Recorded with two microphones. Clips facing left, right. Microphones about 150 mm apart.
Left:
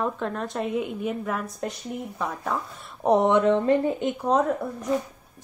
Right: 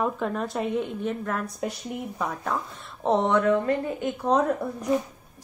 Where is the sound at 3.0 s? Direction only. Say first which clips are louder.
Left 3 dB; 15° left (ahead or behind).